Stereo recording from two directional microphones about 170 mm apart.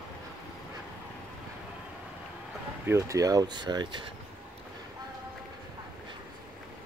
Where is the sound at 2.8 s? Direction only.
15° right (ahead or behind).